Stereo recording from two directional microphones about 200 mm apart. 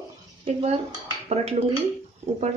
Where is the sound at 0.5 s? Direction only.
30° right (ahead or behind).